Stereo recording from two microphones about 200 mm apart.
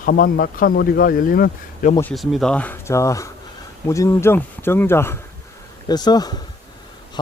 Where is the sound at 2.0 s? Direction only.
Centre (ahead or behind).